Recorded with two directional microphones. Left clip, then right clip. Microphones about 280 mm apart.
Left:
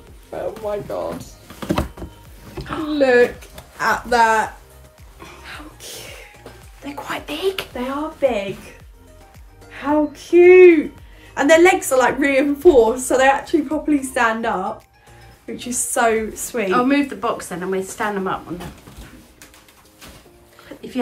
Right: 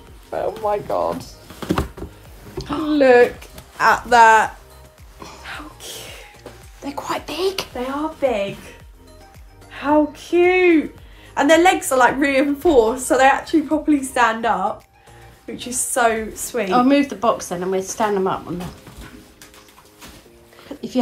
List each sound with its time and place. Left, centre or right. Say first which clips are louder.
0.3 s speech: right 4 dB; right
1.6 s a sound: even; centre
2.6 s speech: right 2 dB; centre
5.2 s music: right 3 dB; centre
6.9 s speech: right 2 dB; centre
9.7 s a woman's voice: right 2 dB; centre